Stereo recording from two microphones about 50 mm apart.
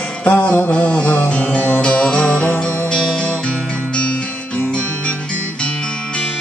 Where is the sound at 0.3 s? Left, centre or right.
Left.